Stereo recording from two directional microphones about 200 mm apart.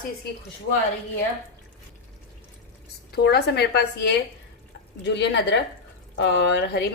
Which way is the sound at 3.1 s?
55° left (ahead or behind).